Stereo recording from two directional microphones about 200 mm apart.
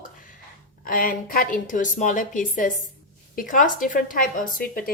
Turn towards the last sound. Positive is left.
turn(degrees=45)  # may be behind; listen again after turning